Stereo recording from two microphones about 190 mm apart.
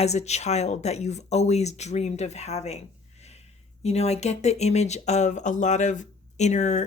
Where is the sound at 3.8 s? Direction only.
35° left (ahead or behind).